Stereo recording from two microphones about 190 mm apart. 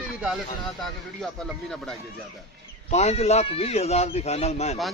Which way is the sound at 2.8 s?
35° left (ahead or behind).